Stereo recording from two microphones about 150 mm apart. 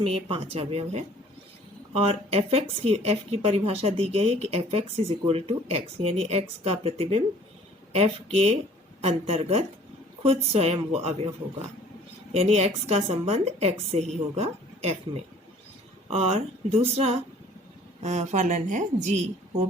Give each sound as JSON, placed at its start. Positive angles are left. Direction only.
{"t": 0.0, "sound": "a woman's voice", "side_deg": -40}
{"t": 12.3, "sound": "speech", "side_deg": -45}